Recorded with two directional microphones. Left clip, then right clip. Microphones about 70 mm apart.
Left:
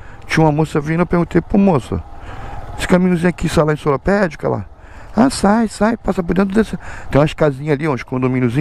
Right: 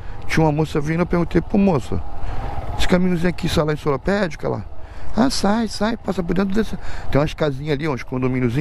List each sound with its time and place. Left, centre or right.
0.3 s speech: left
2.4 s a sound: left
3.2 s speech: left
4.0 s speech: left